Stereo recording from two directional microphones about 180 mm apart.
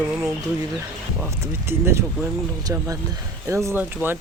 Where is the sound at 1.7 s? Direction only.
15° right (ahead or behind).